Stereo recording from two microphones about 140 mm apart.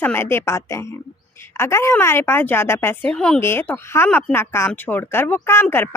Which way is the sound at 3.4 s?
15° left (ahead or behind).